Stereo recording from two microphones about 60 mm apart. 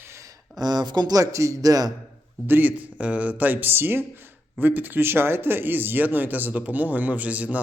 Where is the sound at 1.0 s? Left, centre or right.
Right.